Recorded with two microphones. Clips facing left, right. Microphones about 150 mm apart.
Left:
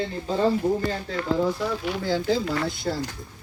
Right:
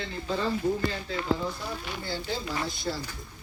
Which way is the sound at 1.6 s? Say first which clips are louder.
Left 9 dB; 90° left.